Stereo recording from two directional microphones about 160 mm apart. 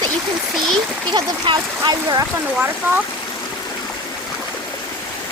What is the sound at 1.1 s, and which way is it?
Speech, 30° right (ahead or behind).